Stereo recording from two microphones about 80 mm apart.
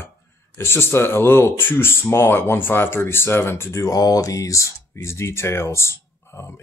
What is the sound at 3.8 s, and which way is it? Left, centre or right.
Speech, left.